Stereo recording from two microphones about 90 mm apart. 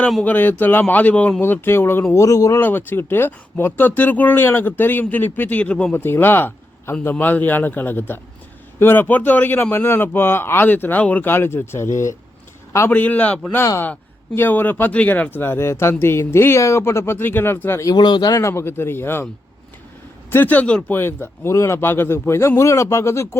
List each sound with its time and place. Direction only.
0.3 s speech: 20° left (ahead or behind)
2.1 s speech: 35° left (ahead or behind)
2.6 s speech: 25° left (ahead or behind)
6.0 s speech: 25° left (ahead or behind)
12.9 s a man's voice: 15° left (ahead or behind)
17.8 s speech: 55° left (ahead or behind); by 19.3 s 25° left (ahead or behind)
20.3 s speech: 20° left (ahead or behind)